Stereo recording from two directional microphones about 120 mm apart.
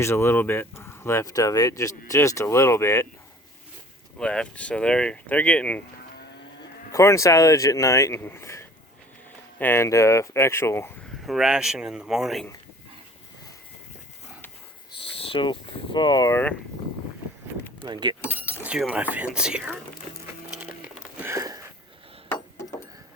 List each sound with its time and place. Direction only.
0.0 s speech: 20° left (ahead or behind)
4.2 s speech: 10° left (ahead or behind)
6.6 s speech: 25° left (ahead or behind)
11.2 s speech: centre (ahead or behind)
15.1 s a sound: 50° left (ahead or behind); by 16.3 s 35° left (ahead or behind)
16.3 s speech: 15° left (ahead or behind)
17.8 s speech: 35° right (ahead or behind)
18.3 s keys jangling: 15° right (ahead or behind)
18.8 s speech: 5° right (ahead or behind)
21.2 s a sound: 25° right (ahead or behind)